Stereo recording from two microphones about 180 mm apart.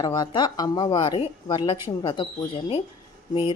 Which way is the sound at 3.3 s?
25° left (ahead or behind).